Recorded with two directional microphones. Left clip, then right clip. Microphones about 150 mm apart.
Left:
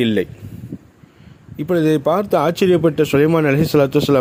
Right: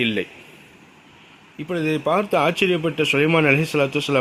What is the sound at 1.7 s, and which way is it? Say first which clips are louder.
Speech: left 6 dB; 60° left (ahead or behind).